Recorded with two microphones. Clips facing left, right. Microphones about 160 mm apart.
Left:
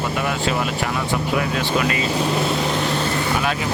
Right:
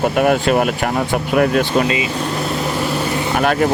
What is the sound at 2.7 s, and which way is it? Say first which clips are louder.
Vehicle: right 2 dB; 5° right (ahead or behind).